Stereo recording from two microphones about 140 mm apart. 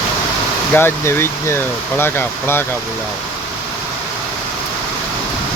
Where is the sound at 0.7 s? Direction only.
15° left (ahead or behind).